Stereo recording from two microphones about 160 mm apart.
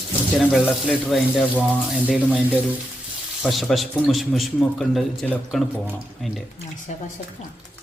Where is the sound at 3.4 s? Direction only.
Centre (ahead or behind).